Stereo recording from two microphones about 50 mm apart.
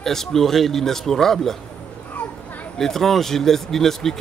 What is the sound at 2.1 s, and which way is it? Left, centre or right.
Children playing, left.